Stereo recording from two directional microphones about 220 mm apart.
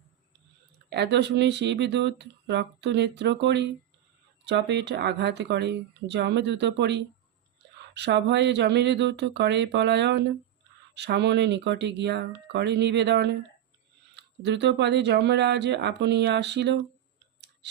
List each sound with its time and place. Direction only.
0.9 s speech: 50° right (ahead or behind)